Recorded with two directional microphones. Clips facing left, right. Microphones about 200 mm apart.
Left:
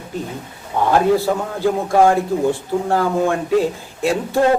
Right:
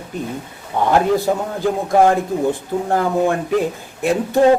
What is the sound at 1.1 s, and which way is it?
A man's voice, 15° right (ahead or behind).